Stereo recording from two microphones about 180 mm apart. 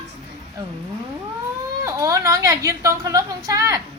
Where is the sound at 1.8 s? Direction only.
15° right (ahead or behind).